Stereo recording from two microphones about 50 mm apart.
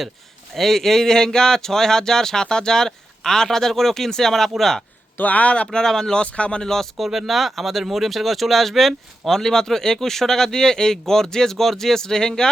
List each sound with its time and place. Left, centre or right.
0.5 s speech: centre
5.1 s speech: left
5.7 s speech: centre
6.2 s speech: left
6.9 s speech: centre